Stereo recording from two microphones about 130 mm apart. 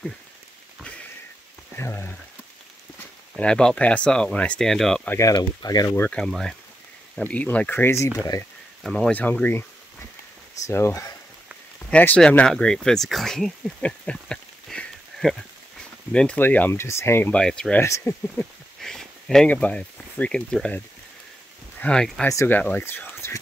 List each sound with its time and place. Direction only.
1.8 s speech: 15° left (ahead or behind)
3.3 s speech: 5° left (ahead or behind)
5.0 s speech: 20° left (ahead or behind)
5.3 s speech: 30° left (ahead or behind)
5.9 s speech: 10° left (ahead or behind)
8.8 s speech: 5° left (ahead or behind); by 10.9 s 20° left (ahead or behind)
11.9 s speech: 10° left (ahead or behind)
17.7 s speech: 20° left (ahead or behind)
18.4 s speech: 5° left (ahead or behind)